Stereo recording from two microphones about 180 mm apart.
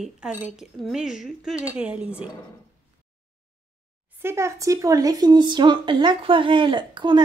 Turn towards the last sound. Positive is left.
turn(degrees=-25)  # may be behind; listen again after turning